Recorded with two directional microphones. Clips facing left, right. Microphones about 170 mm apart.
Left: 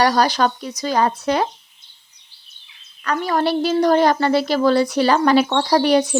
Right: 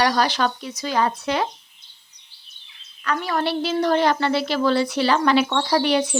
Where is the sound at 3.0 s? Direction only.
40° left (ahead or behind).